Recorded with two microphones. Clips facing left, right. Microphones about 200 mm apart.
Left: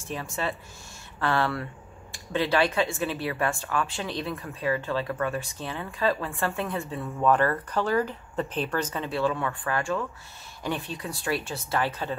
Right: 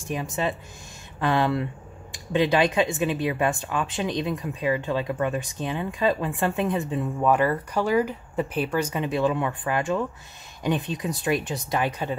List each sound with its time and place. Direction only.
0.0 s speech: 15° right (ahead or behind)